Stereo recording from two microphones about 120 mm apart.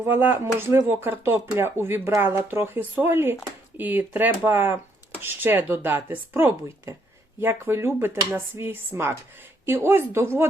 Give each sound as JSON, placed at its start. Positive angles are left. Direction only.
{"t": 0.0, "sound": "speech", "side_deg": -15}